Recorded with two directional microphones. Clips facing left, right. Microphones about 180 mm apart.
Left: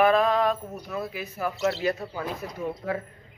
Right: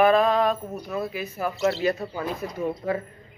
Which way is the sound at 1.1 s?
Centre (ahead or behind).